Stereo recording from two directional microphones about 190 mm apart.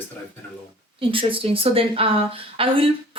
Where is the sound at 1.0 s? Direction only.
30° right (ahead or behind).